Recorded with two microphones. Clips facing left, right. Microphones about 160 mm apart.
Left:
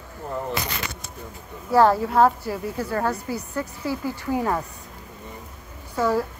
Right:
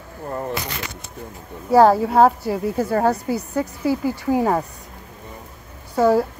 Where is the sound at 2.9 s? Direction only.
40° right (ahead or behind).